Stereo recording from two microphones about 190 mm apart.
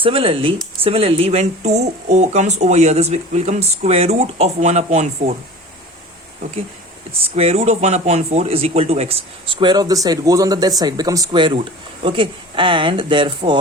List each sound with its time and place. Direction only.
0.0 s speech: 30° right (ahead or behind)
7.1 s speech: 30° right (ahead or behind)